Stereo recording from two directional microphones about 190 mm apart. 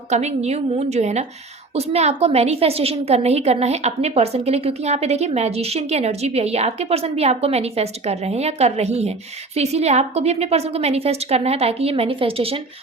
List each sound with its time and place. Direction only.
0.1 s a woman's voice: 35° right (ahead or behind)